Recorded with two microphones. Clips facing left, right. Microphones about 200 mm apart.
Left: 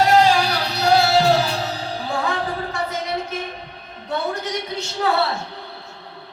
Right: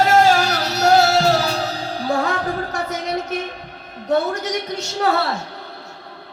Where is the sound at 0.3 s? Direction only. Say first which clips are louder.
Right 2 dB; 45° right (ahead or behind).